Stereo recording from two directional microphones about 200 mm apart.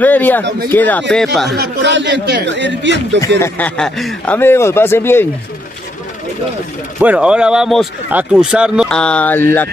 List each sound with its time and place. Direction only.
0.0 s speech: 10° left (ahead or behind)
1.5 s speech: 60° right (ahead or behind)
3.3 s speech: 10° left (ahead or behind)
7.0 s speech: 5° right (ahead or behind); by 9.7 s 10° left (ahead or behind)